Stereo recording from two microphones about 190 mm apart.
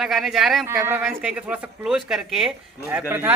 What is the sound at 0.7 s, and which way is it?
Speech, 10° right (ahead or behind).